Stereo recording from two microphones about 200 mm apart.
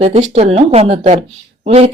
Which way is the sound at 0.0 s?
30° right (ahead or behind).